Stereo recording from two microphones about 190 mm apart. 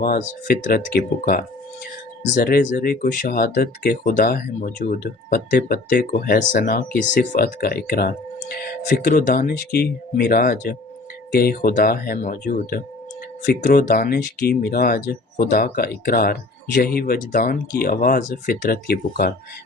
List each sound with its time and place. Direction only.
0.0 s speech: 50° left (ahead or behind)